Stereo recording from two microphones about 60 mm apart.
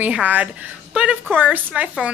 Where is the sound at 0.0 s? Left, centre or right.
Right.